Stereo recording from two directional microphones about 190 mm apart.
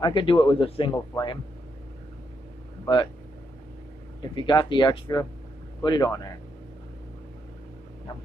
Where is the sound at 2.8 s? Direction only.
25° left (ahead or behind).